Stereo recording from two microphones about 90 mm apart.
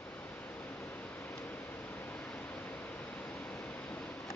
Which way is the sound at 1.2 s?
20° left (ahead or behind).